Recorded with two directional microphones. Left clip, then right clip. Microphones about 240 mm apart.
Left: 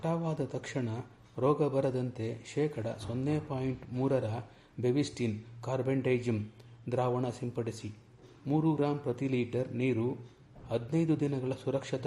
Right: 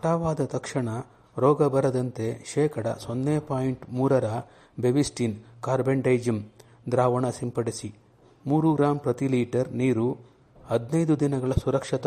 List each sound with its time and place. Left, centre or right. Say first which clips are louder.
0.0 s a man's voice: right 9 dB; right